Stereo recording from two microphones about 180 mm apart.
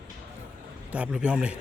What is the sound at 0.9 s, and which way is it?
Speech, 5° right (ahead or behind).